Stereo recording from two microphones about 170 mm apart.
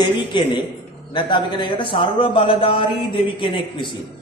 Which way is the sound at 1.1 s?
30° left (ahead or behind).